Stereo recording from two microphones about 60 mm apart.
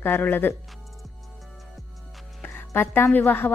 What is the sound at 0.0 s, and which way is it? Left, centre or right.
Speech, left.